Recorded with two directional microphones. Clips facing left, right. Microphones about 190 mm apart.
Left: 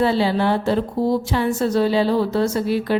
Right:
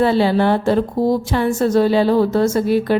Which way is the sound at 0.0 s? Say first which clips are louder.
Right 3 dB; 55° right (ahead or behind).